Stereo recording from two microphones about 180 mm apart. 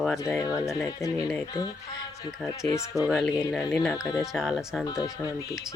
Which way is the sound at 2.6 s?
15° left (ahead or behind).